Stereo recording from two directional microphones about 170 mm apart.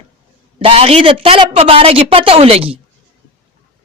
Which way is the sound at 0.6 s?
35° right (ahead or behind).